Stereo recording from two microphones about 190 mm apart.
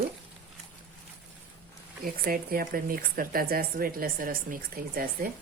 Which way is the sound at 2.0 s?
50° right (ahead or behind).